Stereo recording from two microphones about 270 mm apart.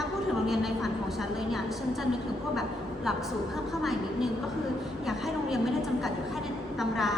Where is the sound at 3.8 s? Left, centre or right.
Centre.